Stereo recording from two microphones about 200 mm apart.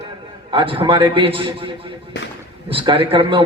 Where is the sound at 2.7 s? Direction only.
25° right (ahead or behind).